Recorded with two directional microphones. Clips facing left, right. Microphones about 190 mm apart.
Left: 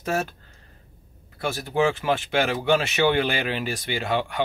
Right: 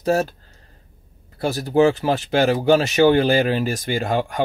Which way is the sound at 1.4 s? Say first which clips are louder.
Right 6 dB; 35° right (ahead or behind).